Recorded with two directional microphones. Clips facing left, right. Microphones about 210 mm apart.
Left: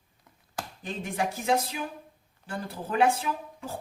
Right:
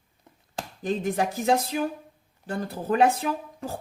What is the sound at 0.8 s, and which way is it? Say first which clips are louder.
Speech: right 6 dB; 40° right (ahead or behind).